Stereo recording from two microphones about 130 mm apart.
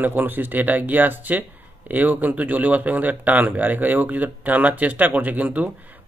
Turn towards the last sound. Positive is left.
turn(degrees=-10)  # may be behind; listen again after turning